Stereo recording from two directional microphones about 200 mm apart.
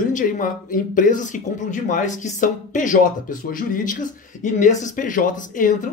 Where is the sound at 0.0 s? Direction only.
40° left (ahead or behind).